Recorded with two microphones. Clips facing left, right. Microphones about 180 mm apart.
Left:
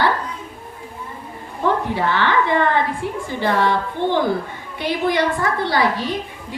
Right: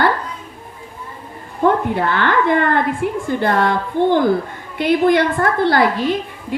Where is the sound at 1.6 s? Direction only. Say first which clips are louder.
Right 4 dB; 50° right (ahead or behind).